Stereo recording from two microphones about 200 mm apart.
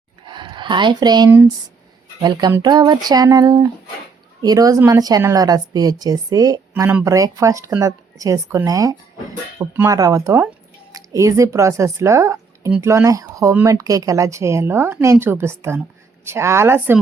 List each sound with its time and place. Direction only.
0.3 s speech: 25° right (ahead or behind)